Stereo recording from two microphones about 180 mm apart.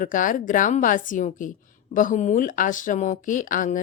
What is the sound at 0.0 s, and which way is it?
A woman's voice, 45° left (ahead or behind).